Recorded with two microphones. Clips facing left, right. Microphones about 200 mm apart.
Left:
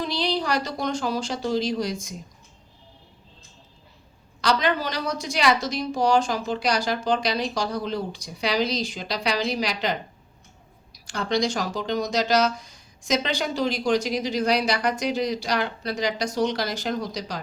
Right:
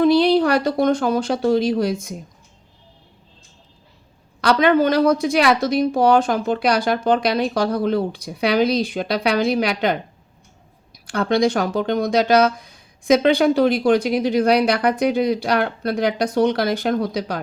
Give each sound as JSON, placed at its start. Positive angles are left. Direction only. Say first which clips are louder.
{"t": 0.0, "sound": "speech", "louder": "right 12 dB", "side_deg": -55}
{"t": 4.4, "sound": "speech", "louder": "right 8 dB", "side_deg": -55}
{"t": 11.0, "sound": "speech", "louder": "right 7 dB", "side_deg": -55}